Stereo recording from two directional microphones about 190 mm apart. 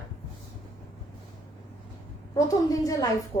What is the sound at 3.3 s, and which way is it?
Speech, 20° left (ahead or behind).